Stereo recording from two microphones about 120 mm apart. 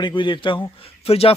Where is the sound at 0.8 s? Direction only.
55° left (ahead or behind).